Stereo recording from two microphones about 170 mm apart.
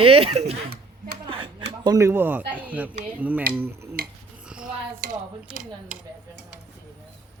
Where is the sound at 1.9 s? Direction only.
15° right (ahead or behind).